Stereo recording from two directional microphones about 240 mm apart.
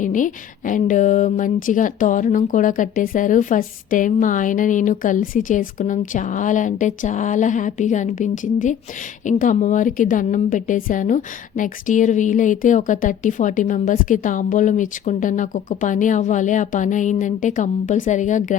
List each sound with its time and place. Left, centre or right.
0.0 s a woman's voice: left